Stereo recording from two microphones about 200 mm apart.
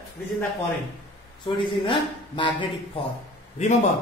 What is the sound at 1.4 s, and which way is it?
Speech, 25° left (ahead or behind).